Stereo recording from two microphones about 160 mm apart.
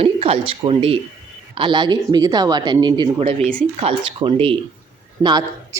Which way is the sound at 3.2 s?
40° right (ahead or behind).